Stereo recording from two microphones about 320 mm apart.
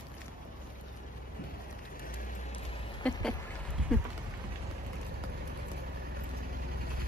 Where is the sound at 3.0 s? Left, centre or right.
Centre.